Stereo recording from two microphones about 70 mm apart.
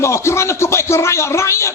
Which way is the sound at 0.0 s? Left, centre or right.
Left.